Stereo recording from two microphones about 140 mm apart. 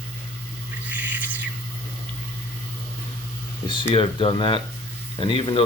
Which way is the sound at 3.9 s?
40° left (ahead or behind).